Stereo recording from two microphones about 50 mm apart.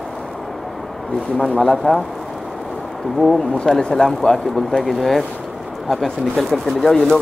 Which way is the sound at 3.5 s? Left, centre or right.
Centre.